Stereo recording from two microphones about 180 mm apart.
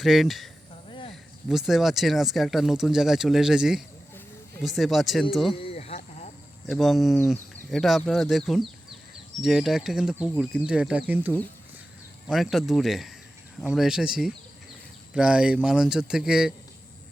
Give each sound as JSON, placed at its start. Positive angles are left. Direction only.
{"t": 0.0, "sound": "speech", "side_deg": 0}
{"t": 0.9, "sound": "snake", "side_deg": 30}
{"t": 1.1, "sound": "speech", "side_deg": 0}
{"t": 5.5, "sound": "a sound", "side_deg": 35}
{"t": 6.7, "sound": "speech", "side_deg": 0}